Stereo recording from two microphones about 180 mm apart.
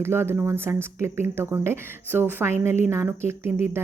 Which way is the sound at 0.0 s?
15° right (ahead or behind).